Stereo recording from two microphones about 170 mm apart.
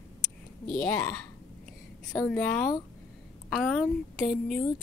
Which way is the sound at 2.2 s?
5° left (ahead or behind).